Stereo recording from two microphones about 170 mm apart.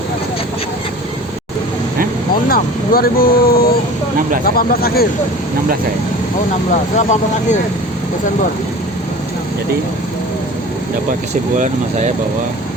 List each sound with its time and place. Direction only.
2.5 s speech: 60° left (ahead or behind)
6.7 s speech: 45° left (ahead or behind)
11.5 s speech: 45° right (ahead or behind)